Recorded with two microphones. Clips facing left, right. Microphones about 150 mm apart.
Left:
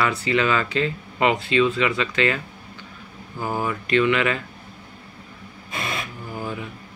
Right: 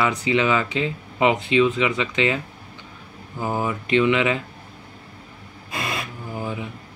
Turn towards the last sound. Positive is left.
turn(degrees=-15)  # may be behind; listen again after turning